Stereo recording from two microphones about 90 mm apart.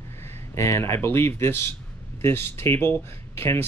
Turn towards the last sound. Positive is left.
turn(degrees=25)  # may be behind; listen again after turning